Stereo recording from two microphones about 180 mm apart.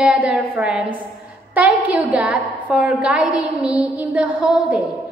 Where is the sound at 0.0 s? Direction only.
5° right (ahead or behind).